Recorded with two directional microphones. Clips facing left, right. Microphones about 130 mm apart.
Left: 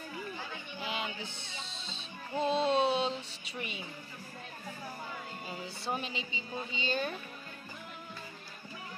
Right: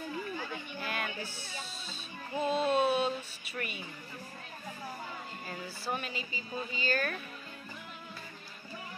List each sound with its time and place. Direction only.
0.7 s music: 15° left (ahead or behind)
2.3 s speech: 10° right (ahead or behind)
2.6 s a sound: 25° left (ahead or behind)
3.5 s a woman's voice: 20° left (ahead or behind)
5.5 s a woman's voice: 25° left (ahead or behind)